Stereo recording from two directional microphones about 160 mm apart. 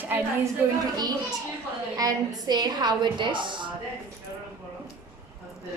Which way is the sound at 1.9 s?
20° right (ahead or behind).